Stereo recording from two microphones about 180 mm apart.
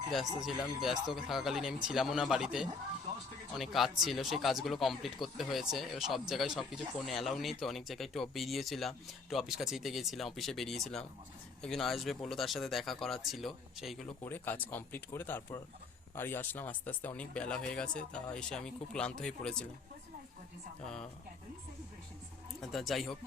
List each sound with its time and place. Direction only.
0.1 s speech: centre (ahead or behind)
14.3 s speech: 10° left (ahead or behind)
20.8 s speech: 5° left (ahead or behind)
22.7 s speech: centre (ahead or behind)